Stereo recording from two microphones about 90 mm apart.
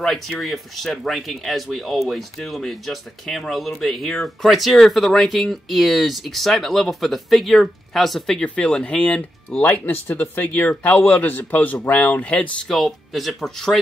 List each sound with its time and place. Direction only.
0.0 s speech: 5° left (ahead or behind)
12.6 s speech: centre (ahead or behind)